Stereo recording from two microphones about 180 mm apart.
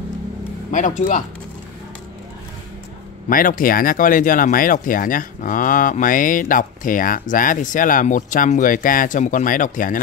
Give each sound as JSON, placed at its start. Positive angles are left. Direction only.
{"t": 0.7, "sound": "speech", "side_deg": 45}
{"t": 3.3, "sound": "speech", "side_deg": 50}